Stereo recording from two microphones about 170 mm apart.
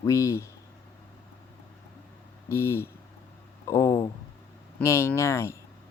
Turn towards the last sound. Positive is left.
turn(degrees=15)  # may be behind; listen again after turning